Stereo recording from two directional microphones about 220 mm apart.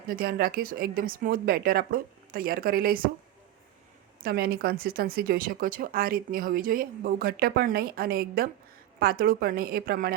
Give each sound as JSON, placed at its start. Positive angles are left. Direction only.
{"t": 0.1, "sound": "speech", "side_deg": -45}
{"t": 4.2, "sound": "speech", "side_deg": -45}